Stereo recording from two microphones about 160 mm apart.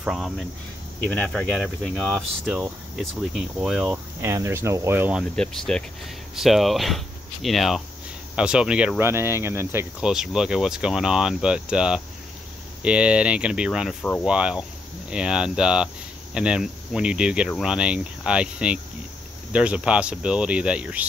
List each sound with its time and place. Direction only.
0.0 s speech: centre (ahead or behind)
4.2 s speech: 15° right (ahead or behind)
5.3 s speech: 5° left (ahead or behind); by 10.0 s 15° right (ahead or behind)
10.0 s speech: 5° right (ahead or behind)